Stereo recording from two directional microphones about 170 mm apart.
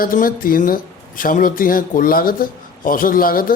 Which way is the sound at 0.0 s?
55° left (ahead or behind).